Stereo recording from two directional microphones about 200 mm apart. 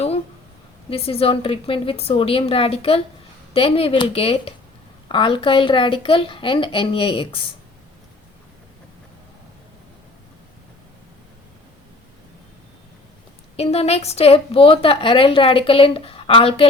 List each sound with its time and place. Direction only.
0.9 s a woman's voice: 30° left (ahead or behind)
13.6 s a woman's voice: 30° left (ahead or behind)